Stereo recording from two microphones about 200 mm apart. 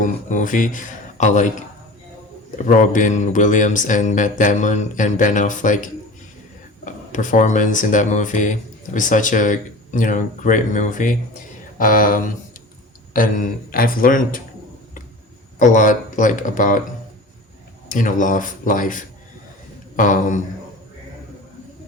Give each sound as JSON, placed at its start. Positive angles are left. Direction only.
{"t": 0.0, "sound": "speech", "side_deg": 40}
{"t": 2.6, "sound": "speech", "side_deg": 40}
{"t": 15.5, "sound": "speech", "side_deg": 40}
{"t": 17.8, "sound": "speech", "side_deg": 40}